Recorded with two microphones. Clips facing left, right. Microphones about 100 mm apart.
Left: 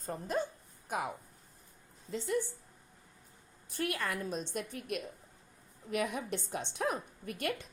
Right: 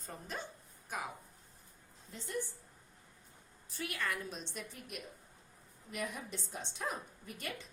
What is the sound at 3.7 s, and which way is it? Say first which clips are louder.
A woman's voice: left 4 dB; 55° left (ahead or behind).